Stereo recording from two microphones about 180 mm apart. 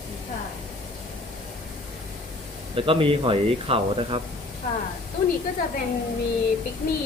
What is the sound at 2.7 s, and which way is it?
Speech, 30° right (ahead or behind).